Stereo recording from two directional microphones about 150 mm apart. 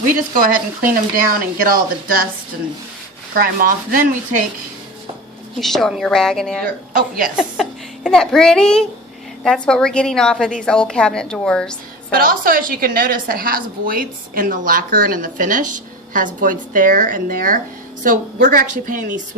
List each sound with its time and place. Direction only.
0.3 s a woman's voice: 65° right (ahead or behind)
3.3 s a woman's voice: 70° right (ahead or behind)
5.5 s a child's voice: centre (ahead or behind)
12.1 s a woman's voice: 70° right (ahead or behind)